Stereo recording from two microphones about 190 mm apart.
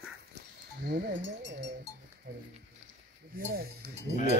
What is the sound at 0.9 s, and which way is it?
Cowbell, 60° right (ahead or behind).